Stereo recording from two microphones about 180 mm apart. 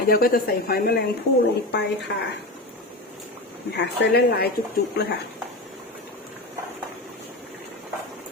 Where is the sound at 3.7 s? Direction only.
65° left (ahead or behind).